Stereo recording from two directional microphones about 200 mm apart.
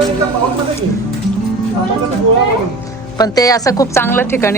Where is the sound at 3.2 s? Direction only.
20° left (ahead or behind).